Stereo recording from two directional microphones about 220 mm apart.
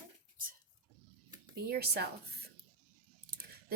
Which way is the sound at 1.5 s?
45° right (ahead or behind).